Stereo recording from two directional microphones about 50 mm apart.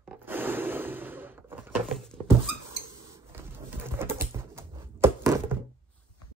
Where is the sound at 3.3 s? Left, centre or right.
Right.